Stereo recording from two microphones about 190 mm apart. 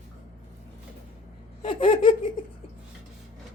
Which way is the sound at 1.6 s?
25° left (ahead or behind).